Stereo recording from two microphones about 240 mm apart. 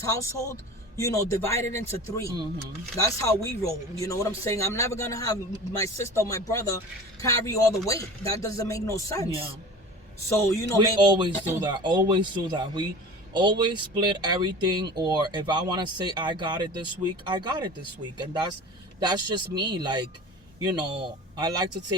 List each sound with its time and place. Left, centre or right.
0.0 s speech: centre
2.2 s speech: centre
3.0 s speech: centre
9.2 s speech: right
10.8 s speech: centre
18.9 s speech: centre